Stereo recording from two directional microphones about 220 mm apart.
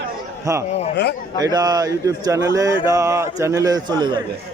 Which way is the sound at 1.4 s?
15° right (ahead or behind).